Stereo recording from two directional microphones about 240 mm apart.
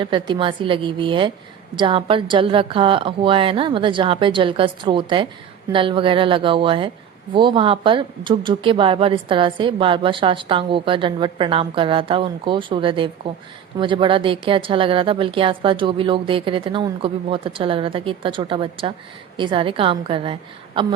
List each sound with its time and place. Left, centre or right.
0.0 s speech: centre